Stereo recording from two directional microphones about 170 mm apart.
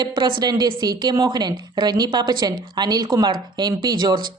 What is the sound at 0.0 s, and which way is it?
Speech, 30° right (ahead or behind).